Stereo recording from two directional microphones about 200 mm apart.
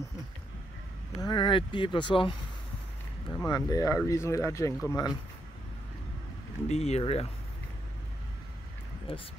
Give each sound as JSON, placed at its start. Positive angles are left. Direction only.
{"t": 1.2, "sound": "speech", "side_deg": 25}
{"t": 3.3, "sound": "speech", "side_deg": 15}
{"t": 6.7, "sound": "speech", "side_deg": 30}